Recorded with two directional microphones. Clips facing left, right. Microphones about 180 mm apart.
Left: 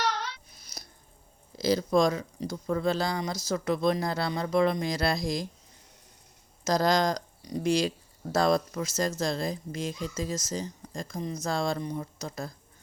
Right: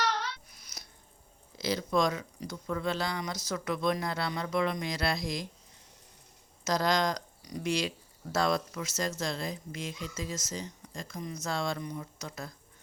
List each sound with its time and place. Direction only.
0.4 s a sound: 30° left (ahead or behind)
1.5 s speech: 35° left (ahead or behind)
6.7 s speech: 35° left (ahead or behind)